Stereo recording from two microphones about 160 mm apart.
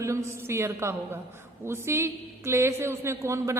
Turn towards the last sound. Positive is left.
turn(degrees=-20)  # may be behind; listen again after turning